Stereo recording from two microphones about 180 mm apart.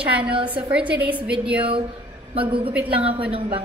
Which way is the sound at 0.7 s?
5° right (ahead or behind).